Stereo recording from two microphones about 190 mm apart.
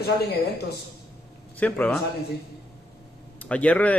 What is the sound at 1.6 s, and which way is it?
Speech, 5° left (ahead or behind).